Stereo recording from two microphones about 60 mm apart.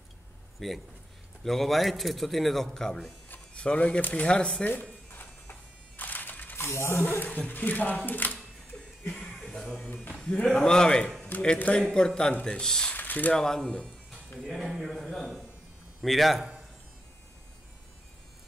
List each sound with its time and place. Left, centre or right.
0.6 s a man's voice: centre
3.5 s speech: centre
5.1 s electric shaver: left
7.3 s speech: left
9.4 s music: centre
10.0 s speech: centre
11.5 s speech: left
11.9 s speech: centre
12.9 s a sound: left
13.3 s speech: centre
14.4 s a man's voice: centre